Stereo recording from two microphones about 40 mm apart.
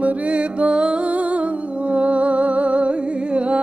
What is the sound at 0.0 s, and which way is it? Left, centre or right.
Music, right.